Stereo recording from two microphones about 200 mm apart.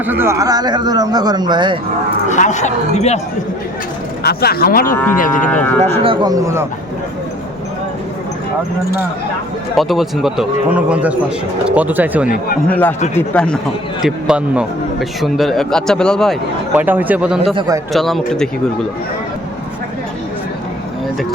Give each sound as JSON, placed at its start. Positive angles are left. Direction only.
{"t": 0.0, "sound": "speech", "side_deg": -10}
{"t": 2.3, "sound": "speech", "side_deg": 35}
{"t": 4.2, "sound": "speech", "side_deg": 50}
{"t": 5.5, "sound": "speech", "side_deg": 10}
{"t": 5.8, "sound": "speech", "side_deg": -30}
{"t": 9.7, "sound": "a man's voice", "side_deg": 0}
{"t": 12.6, "sound": "a man's voice", "side_deg": 5}
{"t": 16.7, "sound": "a man's voice", "side_deg": -10}
{"t": 17.5, "sound": "speech", "side_deg": -25}
{"t": 17.9, "sound": "a man's voice", "side_deg": 0}